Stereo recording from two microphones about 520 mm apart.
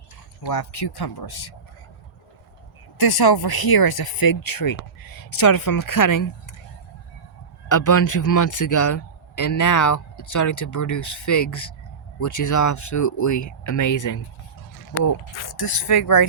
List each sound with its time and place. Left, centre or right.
0.4 s speech: left
3.0 s a man's voice: left
7.7 s a man's voice: left